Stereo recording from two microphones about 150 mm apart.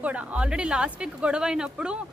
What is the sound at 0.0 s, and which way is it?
A woman's voice, 10° right (ahead or behind).